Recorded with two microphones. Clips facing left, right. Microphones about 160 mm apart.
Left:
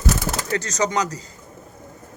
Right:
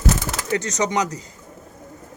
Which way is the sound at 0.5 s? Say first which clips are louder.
Right 1 dB; 20° right (ahead or behind).